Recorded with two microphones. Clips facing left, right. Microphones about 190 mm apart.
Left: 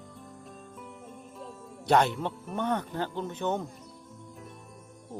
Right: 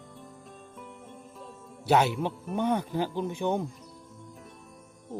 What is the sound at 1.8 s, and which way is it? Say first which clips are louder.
Speech: even; 5° right (ahead or behind).